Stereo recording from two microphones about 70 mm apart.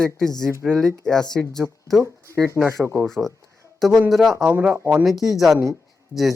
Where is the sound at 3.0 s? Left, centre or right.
Centre.